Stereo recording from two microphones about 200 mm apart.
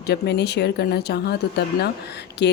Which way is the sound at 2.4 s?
60° left (ahead or behind).